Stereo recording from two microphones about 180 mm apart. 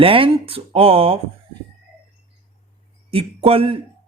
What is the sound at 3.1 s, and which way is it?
Speech, 35° right (ahead or behind).